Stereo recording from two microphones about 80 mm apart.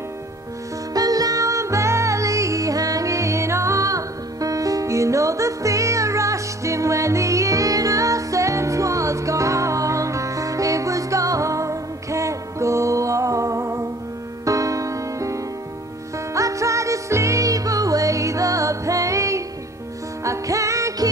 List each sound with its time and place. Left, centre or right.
0.9 s music: right